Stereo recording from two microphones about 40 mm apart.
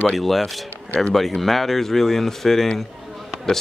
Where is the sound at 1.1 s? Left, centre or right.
Centre.